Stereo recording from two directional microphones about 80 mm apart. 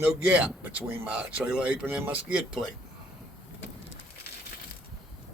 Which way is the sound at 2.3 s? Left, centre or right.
Centre.